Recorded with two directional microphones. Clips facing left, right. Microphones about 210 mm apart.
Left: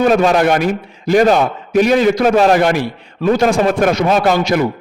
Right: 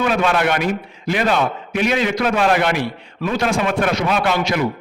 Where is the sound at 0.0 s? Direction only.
40° left (ahead or behind).